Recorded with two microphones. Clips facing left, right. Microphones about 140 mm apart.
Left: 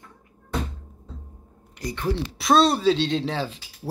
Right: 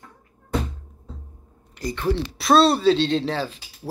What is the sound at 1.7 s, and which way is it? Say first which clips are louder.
Speech: right 3 dB; 15° left (ahead or behind).